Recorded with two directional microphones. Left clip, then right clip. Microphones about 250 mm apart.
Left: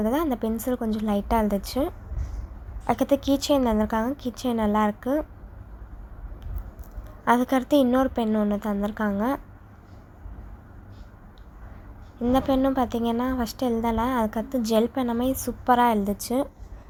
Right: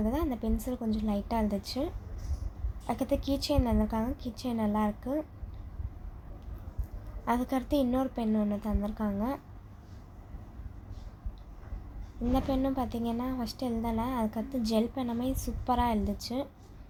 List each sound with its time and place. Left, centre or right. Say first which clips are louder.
0.0 s a woman's voice: left 8 dB; left
7.3 s a woman's voice: left 9 dB; left
12.3 s a woman's voice: left 8 dB; left